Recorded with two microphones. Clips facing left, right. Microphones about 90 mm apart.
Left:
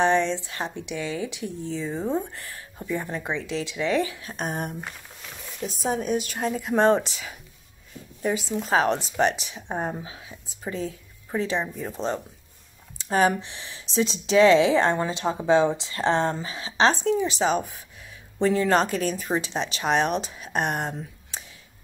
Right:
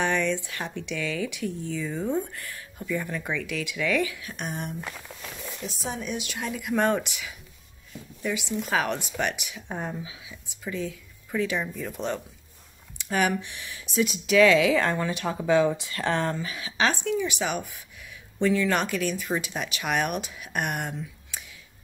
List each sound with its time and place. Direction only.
0.0 s a woman's voice: 25° left (ahead or behind)